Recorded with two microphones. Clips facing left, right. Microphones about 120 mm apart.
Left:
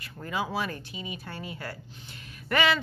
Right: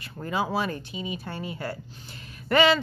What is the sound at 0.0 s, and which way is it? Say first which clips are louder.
Speech: right 4 dB; 30° right (ahead or behind).